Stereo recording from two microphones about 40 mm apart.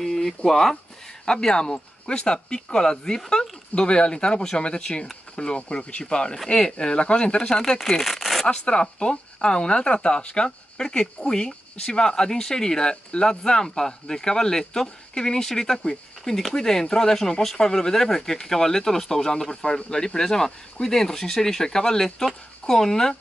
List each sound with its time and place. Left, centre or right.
0.0 s a sound: centre
0.5 s speech: centre
1.2 s speech: centre
7.8 s crumpling: centre
8.5 s speech: left